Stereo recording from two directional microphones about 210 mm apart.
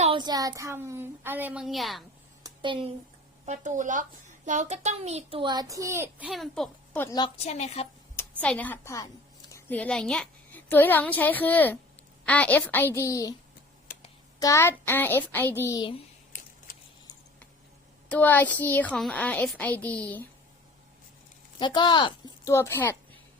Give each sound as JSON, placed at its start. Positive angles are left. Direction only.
{"t": 0.0, "sound": "a child's voice", "side_deg": -25}
{"t": 2.4, "sound": "a sound", "side_deg": -20}
{"t": 3.4, "sound": "a child's voice", "side_deg": -35}
{"t": 7.3, "sound": "a woman's voice", "side_deg": 30}
{"t": 8.1, "sound": "a woman's voice", "side_deg": 10}
{"t": 18.1, "sound": "a woman's voice", "side_deg": 10}
{"t": 21.6, "sound": "a woman's voice", "side_deg": 20}